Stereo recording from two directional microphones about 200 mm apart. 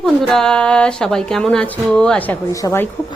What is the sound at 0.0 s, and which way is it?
A woman's voice, 5° left (ahead or behind).